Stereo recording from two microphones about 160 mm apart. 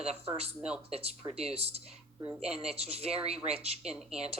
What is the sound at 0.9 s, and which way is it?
Speech, 40° right (ahead or behind).